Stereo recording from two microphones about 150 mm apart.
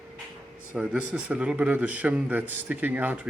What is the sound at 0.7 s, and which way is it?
A man's voice, 5° right (ahead or behind).